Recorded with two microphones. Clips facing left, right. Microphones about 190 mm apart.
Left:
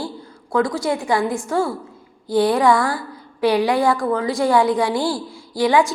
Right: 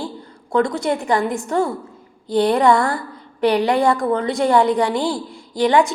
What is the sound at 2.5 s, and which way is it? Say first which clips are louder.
Speech: right 1 dB; centre (ahead or behind).